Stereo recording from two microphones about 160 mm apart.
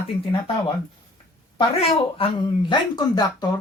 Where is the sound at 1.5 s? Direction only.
35° left (ahead or behind).